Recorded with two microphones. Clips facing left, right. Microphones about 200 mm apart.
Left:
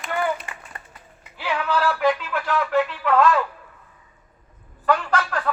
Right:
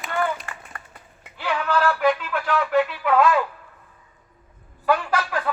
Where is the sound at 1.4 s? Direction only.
5° left (ahead or behind).